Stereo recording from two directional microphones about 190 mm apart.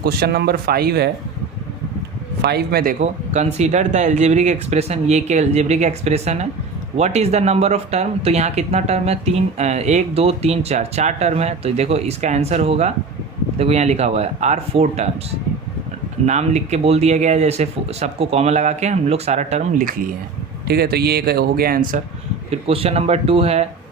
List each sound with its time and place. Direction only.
0.0 s speech: 55° right (ahead or behind)
2.4 s speech: 55° right (ahead or behind)
3.0 s speech: 35° right (ahead or behind)
16.2 s speech: 35° right (ahead or behind)
22.4 s speech: 30° right (ahead or behind)